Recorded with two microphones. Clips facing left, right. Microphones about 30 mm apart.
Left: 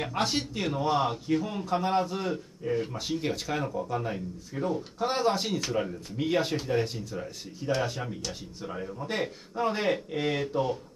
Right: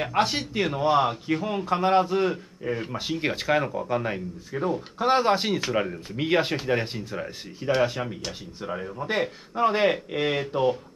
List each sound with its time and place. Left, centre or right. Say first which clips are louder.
0.0 s a man's voice: right 5 dB; centre
4.6 s a man's voice: right 6 dB; right